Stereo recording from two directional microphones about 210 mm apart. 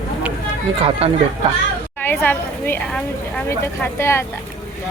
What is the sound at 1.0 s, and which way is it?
Speech, 25° right (ahead or behind).